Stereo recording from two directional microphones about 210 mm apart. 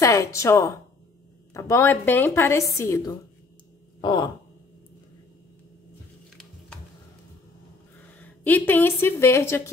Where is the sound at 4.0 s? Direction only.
20° left (ahead or behind).